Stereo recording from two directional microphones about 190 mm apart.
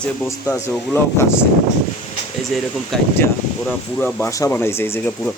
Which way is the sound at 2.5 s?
Centre (ahead or behind).